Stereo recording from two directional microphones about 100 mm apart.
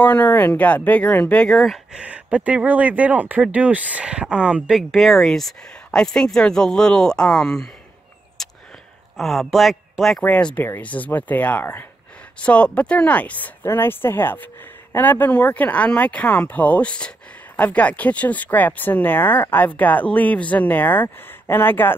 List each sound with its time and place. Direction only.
0.0 s speech: 15° left (ahead or behind)
2.0 s speech: 15° right (ahead or behind); by 7.7 s 5° left (ahead or behind)
8.4 s a sound: 5° left (ahead or behind)
9.1 s a man's voice: centre (ahead or behind)
10.2 s speech: 15° left (ahead or behind)